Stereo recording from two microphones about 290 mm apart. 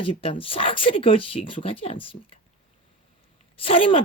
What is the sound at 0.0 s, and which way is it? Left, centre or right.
Speech, centre.